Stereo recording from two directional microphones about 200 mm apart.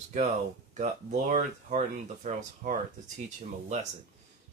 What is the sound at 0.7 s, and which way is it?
Speech, 35° right (ahead or behind).